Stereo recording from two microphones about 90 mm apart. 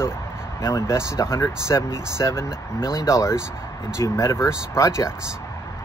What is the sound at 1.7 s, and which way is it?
Speech, 45° left (ahead or behind).